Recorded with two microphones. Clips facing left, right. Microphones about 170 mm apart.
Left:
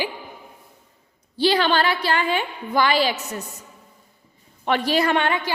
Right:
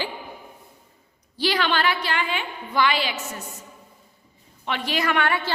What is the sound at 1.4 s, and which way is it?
A woman's voice, 30° left (ahead or behind).